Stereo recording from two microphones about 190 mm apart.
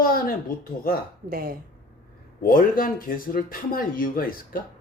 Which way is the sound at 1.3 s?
55° right (ahead or behind).